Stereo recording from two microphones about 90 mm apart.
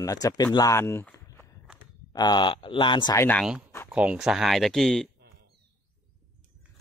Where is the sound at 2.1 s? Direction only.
50° left (ahead or behind).